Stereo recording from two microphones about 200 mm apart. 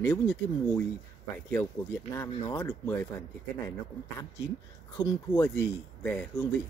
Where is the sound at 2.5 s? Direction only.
15° left (ahead or behind).